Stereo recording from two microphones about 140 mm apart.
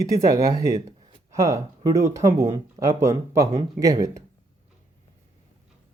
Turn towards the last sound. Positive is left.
turn(degrees=-25)  # may be behind; listen again after turning